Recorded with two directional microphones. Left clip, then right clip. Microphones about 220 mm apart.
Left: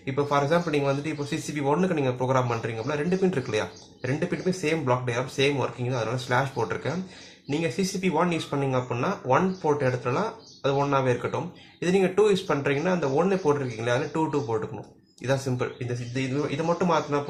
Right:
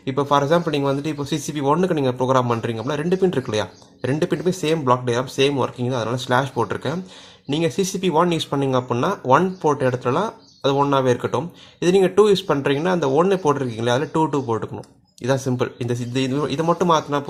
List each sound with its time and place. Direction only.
0.0 s speech: 40° right (ahead or behind)
7.6 s speech: 40° right (ahead or behind)
15.3 s a man's voice: 40° right (ahead or behind)